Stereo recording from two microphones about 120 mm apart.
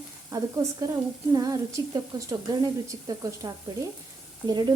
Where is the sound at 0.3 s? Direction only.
30° right (ahead or behind).